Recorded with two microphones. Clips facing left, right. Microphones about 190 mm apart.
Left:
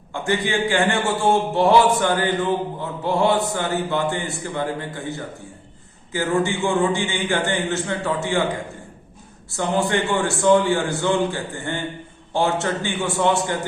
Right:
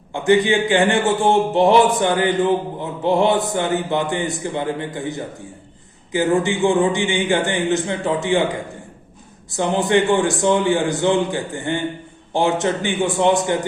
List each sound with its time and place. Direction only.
0.1 s a man's voice: 20° right (ahead or behind)
9.5 s speech: 20° right (ahead or behind)